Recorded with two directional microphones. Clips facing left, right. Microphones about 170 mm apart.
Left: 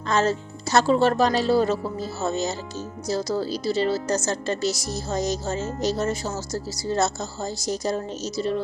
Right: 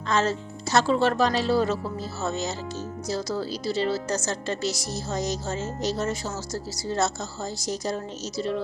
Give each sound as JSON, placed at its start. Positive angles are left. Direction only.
{"t": 0.1, "sound": "a woman's voice", "side_deg": 45}